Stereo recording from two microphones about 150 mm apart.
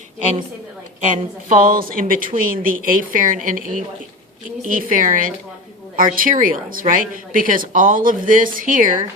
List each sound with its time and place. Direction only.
1.0 s a woman's voice: 60° right (ahead or behind)